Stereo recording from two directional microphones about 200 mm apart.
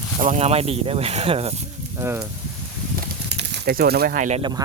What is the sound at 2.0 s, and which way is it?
Speech, 10° right (ahead or behind).